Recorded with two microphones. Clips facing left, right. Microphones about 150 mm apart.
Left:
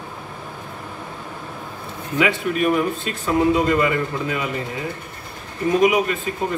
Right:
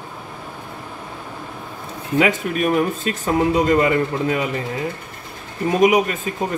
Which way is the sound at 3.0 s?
45° right (ahead or behind).